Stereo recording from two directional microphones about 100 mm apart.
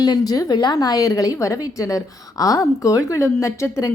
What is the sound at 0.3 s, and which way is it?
A woman's voice, 40° left (ahead or behind).